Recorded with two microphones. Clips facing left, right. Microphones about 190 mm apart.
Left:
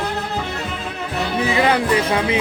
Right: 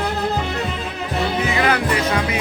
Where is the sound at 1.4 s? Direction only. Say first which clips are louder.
Left 4 dB; 30° left (ahead or behind).